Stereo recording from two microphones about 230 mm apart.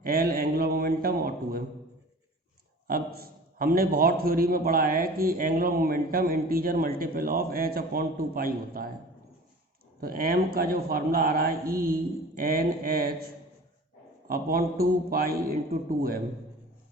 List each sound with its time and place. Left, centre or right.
0.0 s a man's voice: right
2.8 s a man's voice: right
10.0 s a man's voice: right